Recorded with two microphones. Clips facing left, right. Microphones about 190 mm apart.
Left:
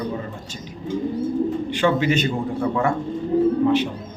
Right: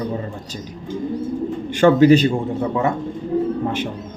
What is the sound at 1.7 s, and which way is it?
Speech, 45° right (ahead or behind).